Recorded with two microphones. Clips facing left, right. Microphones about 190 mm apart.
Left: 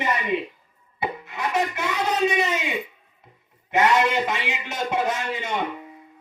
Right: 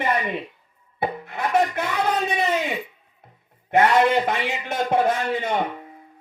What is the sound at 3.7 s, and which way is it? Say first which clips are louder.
Speech: right 3 dB; 55° right (ahead or behind).